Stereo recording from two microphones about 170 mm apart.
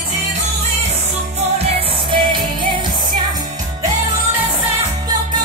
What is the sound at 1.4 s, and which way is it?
Music, 35° right (ahead or behind).